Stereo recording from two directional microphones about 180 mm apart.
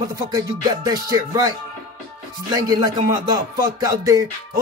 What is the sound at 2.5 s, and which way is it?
Music, 25° right (ahead or behind).